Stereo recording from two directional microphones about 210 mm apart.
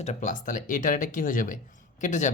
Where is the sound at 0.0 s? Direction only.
35° left (ahead or behind).